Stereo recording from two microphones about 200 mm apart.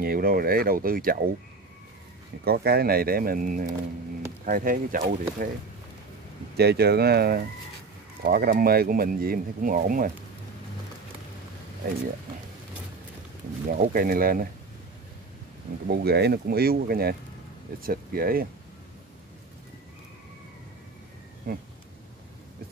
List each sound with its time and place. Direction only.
0.0 s speech: 45° right (ahead or behind)
2.4 s speech: 50° right (ahead or behind)
6.5 s speech: 55° right (ahead or behind)
13.7 s speech: 45° right (ahead or behind)
15.9 s speech: 50° right (ahead or behind)
21.5 s speech: 50° right (ahead or behind)